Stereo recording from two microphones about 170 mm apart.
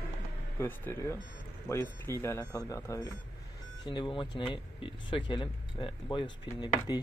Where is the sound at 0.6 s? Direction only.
15° left (ahead or behind).